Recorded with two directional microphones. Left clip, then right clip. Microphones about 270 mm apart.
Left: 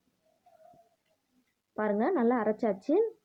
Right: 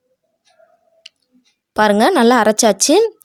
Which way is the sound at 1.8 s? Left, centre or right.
Right.